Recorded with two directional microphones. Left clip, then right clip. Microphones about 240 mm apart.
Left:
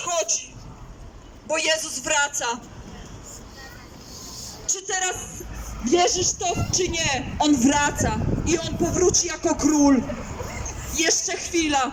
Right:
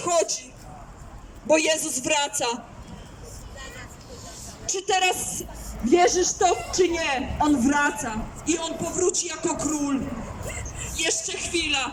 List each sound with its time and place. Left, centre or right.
0.0 s a sound: right
1.5 s a man's voice: centre
4.6 s a woman's voice: centre; by 11.9 s left